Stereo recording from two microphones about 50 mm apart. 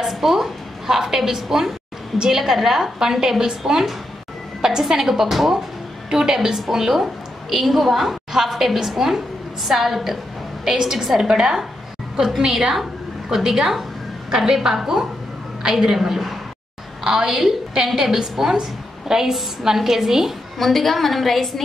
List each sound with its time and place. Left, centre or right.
0.0 s a woman's voice: centre